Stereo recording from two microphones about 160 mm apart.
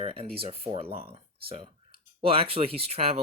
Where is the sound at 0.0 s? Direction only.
40° right (ahead or behind).